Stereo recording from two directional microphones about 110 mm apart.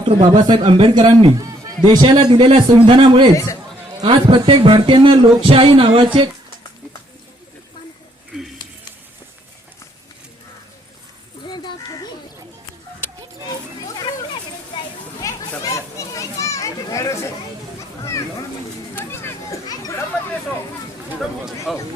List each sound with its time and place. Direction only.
0.2 s a man's voice: 45° right (ahead or behind)
1.4 s music: 35° right (ahead or behind)
2.3 s speech: 55° right (ahead or behind)
3.3 s a man's voice: 30° left (ahead or behind)
4.0 s a man's voice: 50° right (ahead or behind)
11.4 s a sound: 40° left (ahead or behind)
15.2 s children playing: 30° left (ahead or behind)
18.0 s a sound: 30° left (ahead or behind)
19.6 s children playing: 35° left (ahead or behind)
21.7 s a sound: centre (ahead or behind)